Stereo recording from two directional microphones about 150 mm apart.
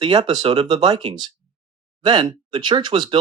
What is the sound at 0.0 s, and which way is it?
Speech, 30° right (ahead or behind).